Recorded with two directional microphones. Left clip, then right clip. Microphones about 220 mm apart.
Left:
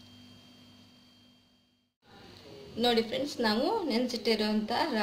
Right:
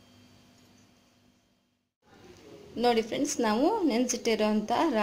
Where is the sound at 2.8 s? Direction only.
35° right (ahead or behind).